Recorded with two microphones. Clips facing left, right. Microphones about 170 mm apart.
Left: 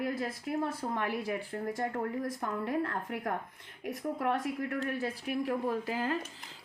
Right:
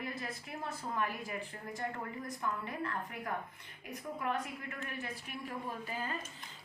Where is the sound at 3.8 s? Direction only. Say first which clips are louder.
Left 7 dB; 65° left (ahead or behind).